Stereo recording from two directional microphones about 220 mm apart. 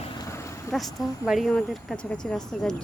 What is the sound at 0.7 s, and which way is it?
Speech, centre (ahead or behind).